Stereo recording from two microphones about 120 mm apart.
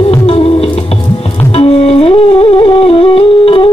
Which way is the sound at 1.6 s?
60° left (ahead or behind).